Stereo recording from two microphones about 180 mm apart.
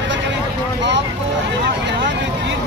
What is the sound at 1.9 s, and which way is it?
Speech, 75° right (ahead or behind).